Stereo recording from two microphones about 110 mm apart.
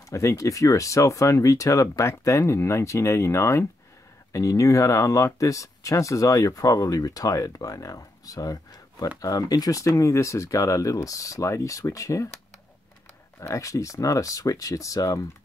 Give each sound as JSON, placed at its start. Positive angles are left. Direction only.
{"t": 0.1, "sound": "speech", "side_deg": 30}
{"t": 13.4, "sound": "speech", "side_deg": 30}